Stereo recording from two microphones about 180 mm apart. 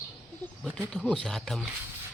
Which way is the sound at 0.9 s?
Centre (ahead or behind).